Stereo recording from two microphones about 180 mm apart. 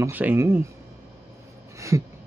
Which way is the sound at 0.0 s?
10° right (ahead or behind).